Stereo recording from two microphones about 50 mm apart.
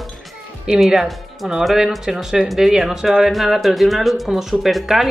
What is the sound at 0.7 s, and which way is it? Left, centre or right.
Speech, centre.